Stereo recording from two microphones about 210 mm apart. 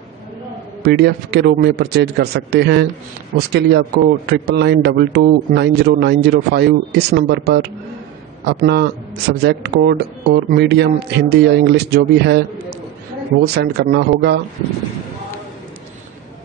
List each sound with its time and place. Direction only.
0.8 s a man's voice: 50° right (ahead or behind)
13.7 s a man's voice: 50° right (ahead or behind)